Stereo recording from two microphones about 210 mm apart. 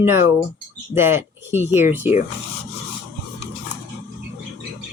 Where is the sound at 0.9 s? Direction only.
10° right (ahead or behind).